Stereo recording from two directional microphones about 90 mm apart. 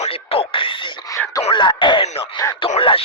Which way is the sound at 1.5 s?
60° left (ahead or behind).